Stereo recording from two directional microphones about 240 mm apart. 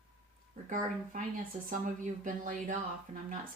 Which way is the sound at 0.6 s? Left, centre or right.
Right.